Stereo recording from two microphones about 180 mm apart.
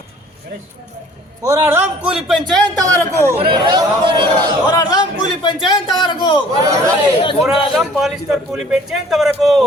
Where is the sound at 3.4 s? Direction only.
25° right (ahead or behind).